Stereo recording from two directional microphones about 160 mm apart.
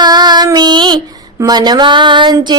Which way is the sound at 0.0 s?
25° right (ahead or behind).